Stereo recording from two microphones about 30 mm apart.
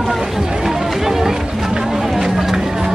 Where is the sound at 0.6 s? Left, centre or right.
Centre.